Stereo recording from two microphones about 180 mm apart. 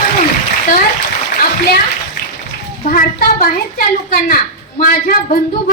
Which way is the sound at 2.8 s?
50° left (ahead or behind).